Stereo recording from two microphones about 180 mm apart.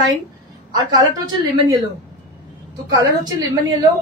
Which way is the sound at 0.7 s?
20° right (ahead or behind).